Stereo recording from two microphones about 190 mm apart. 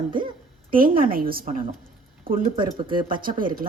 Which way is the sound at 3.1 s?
45° right (ahead or behind).